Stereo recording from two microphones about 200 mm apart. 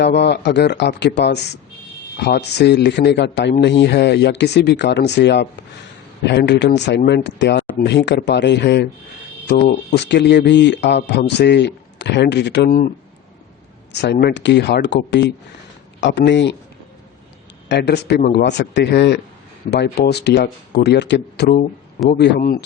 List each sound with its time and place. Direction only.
0.0 s speech: 60° left (ahead or behind)
14.0 s speech: 55° left (ahead or behind)
17.7 s speech: 55° left (ahead or behind)